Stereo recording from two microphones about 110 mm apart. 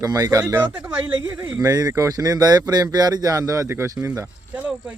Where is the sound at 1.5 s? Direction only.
35° right (ahead or behind).